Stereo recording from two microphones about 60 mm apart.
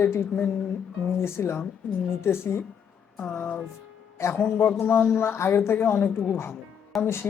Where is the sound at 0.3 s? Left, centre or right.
Left.